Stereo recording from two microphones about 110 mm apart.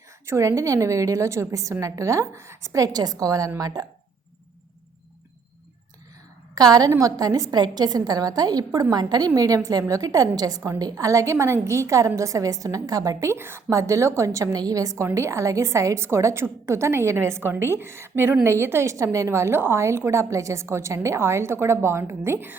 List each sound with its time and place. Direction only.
0.3 s a woman's voice: 25° right (ahead or behind)
6.5 s a woman's voice: 35° right (ahead or behind)